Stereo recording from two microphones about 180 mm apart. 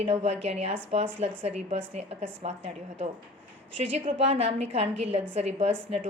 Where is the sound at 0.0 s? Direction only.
35° right (ahead or behind).